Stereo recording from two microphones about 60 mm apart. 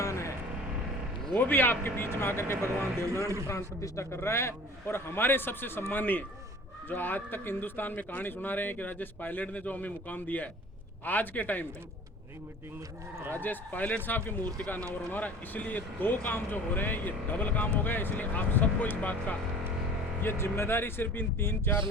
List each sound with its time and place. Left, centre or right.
0.0 s music: left
1.4 s a man's voice: left
3.4 s a man's voice: left
13.3 s a man's voice: left
20.2 s a man's voice: left